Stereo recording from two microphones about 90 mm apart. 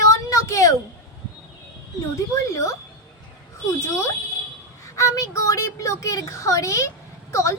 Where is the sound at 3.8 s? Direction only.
35° left (ahead or behind).